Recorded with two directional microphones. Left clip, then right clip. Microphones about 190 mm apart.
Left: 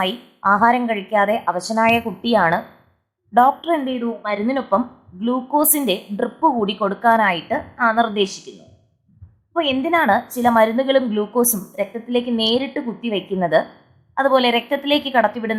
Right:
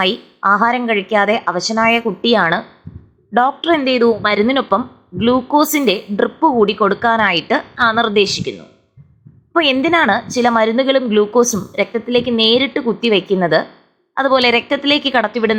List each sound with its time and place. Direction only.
0.0 s a woman's voice: 15° right (ahead or behind)
9.6 s a woman's voice: 20° right (ahead or behind)